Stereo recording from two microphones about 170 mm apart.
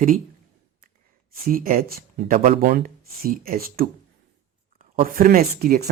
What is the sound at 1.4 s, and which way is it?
Speech, 55° right (ahead or behind).